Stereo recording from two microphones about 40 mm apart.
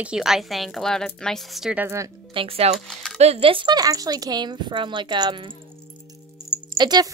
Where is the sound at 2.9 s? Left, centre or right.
Centre.